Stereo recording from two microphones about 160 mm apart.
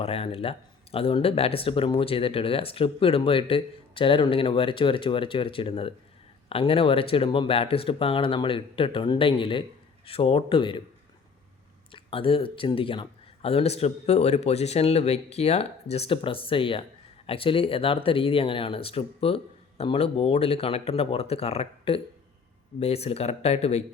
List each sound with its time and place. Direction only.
0.0 s speech: 35° left (ahead or behind)
11.9 s speech: 35° left (ahead or behind)